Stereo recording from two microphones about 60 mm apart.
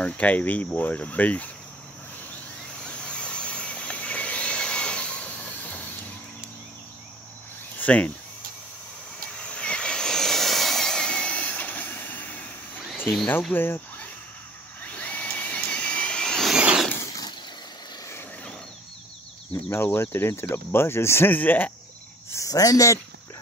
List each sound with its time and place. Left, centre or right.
0.0 s speech: left
2.8 s vehicle: centre
7.8 s speech: left
9.3 s vehicle: centre
13.5 s speech: left
14.8 s a sound: left
16.5 s a sound: centre
17.0 s a sound: left
19.7 s speech: left
21.3 s speech: left
22.3 s speech: left